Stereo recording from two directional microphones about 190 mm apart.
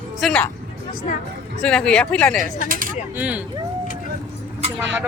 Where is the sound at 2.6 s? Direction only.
50° right (ahead or behind).